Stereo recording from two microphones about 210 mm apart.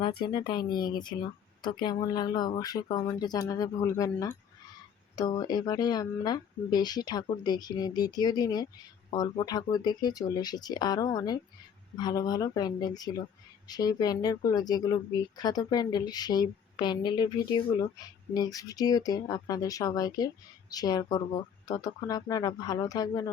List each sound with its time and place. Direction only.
0.0 s speech: 25° left (ahead or behind)